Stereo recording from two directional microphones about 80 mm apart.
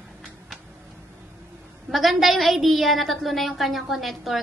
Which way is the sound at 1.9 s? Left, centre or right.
Centre.